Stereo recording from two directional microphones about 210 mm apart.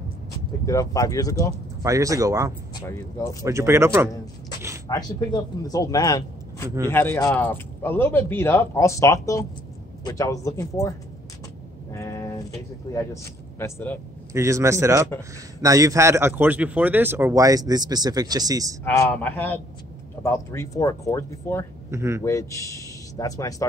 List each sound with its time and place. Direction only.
0.7 s speech: 15° left (ahead or behind)
1.8 s a man's voice: 15° right (ahead or behind)
2.7 s speech: 15° left (ahead or behind)
3.4 s a man's voice: 15° right (ahead or behind)
4.8 s speech: 20° left (ahead or behind)
11.9 s a sound: 15° left (ahead or behind)
12.9 s speech: 15° left (ahead or behind)
14.3 s a man's voice: 15° right (ahead or behind)
18.9 s speech: 10° left (ahead or behind)
21.9 s a man's voice: 15° right (ahead or behind)
22.2 s a man's voice: 15° left (ahead or behind)